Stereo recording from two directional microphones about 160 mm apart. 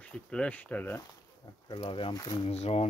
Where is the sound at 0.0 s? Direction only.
5° left (ahead or behind).